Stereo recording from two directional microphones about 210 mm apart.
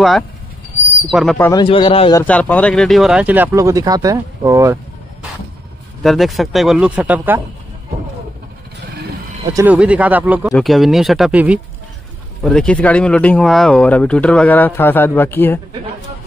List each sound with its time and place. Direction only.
1.1 s speech: centre (ahead or behind)
1.5 s speech: 25° left (ahead or behind)
2.2 s speech: 5° left (ahead or behind); by 4.7 s 15° right (ahead or behind)
6.0 s speech: centre (ahead or behind)
9.5 s speech: 10° right (ahead or behind); by 15.6 s 10° left (ahead or behind)